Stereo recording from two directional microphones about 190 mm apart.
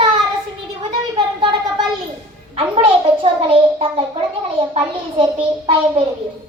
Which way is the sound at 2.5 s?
30° right (ahead or behind).